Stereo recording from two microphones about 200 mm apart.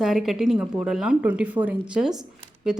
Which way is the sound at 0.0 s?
Centre (ahead or behind).